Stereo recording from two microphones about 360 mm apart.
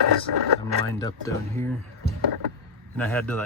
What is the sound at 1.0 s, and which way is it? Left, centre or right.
Speech, centre.